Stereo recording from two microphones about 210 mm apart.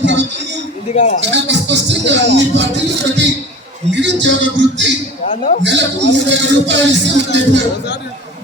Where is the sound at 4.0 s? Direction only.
55° right (ahead or behind).